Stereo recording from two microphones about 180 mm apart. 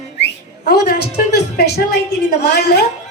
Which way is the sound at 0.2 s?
55° left (ahead or behind).